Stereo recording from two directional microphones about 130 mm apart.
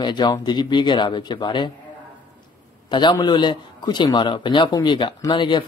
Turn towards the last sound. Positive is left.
turn(degrees=35)  # may be behind; listen again after turning